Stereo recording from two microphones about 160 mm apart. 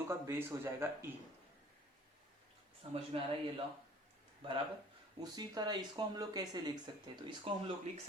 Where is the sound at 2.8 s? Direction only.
35° right (ahead or behind).